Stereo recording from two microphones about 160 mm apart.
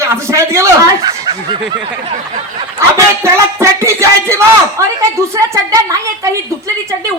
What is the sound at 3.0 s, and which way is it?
Speech, 20° right (ahead or behind).